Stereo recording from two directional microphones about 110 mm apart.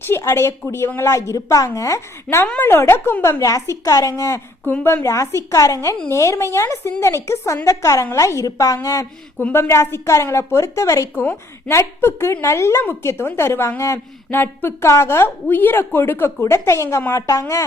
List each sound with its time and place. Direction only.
0.2 s a woman's voice: 25° left (ahead or behind)
4.6 s a woman's voice: 20° left (ahead or behind)
9.4 s a woman's voice: 20° left (ahead or behind)